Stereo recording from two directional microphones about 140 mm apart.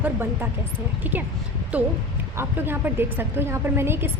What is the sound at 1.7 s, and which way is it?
A woman's voice, 10° right (ahead or behind).